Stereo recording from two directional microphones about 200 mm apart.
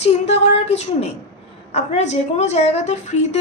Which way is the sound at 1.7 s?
35° left (ahead or behind).